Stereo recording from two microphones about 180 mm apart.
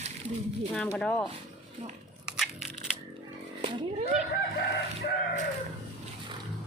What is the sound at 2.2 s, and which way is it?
Crushing, 5° right (ahead or behind).